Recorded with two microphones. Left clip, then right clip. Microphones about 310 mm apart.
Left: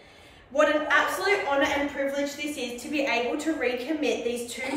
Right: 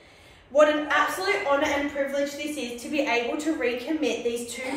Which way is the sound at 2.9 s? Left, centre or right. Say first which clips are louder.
Right 1 dB; centre.